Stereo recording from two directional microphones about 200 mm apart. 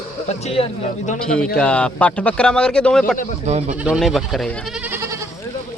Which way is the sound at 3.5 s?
35° right (ahead or behind).